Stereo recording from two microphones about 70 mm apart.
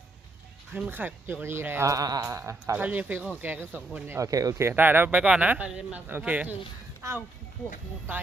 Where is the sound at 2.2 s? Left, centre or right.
Right.